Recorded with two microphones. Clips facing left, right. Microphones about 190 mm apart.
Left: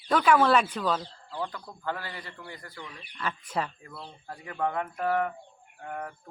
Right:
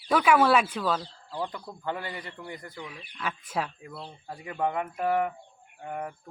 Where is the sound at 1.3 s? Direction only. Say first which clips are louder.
Right 2 dB; 15° right (ahead or behind).